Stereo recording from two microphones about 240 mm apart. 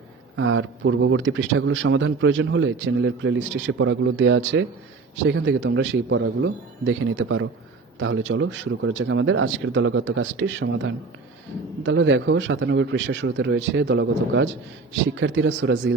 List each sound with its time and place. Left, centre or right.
0.3 s speech: right